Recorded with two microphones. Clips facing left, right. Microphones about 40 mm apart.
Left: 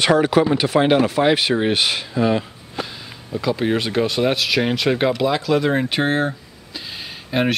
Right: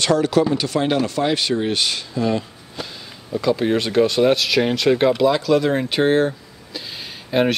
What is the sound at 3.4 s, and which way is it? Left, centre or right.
Speech, centre.